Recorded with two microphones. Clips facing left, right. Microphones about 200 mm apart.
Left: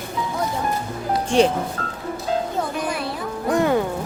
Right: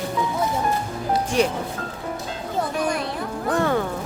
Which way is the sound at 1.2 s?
30° left (ahead or behind).